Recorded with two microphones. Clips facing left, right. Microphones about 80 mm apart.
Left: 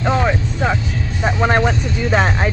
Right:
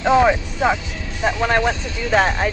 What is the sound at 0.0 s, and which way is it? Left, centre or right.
Vehicle, centre.